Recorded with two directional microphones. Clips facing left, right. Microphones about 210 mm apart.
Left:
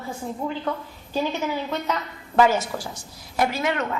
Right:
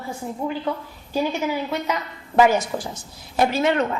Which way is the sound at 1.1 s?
10° right (ahead or behind).